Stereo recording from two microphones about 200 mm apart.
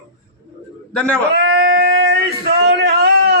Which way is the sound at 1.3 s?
50° right (ahead or behind).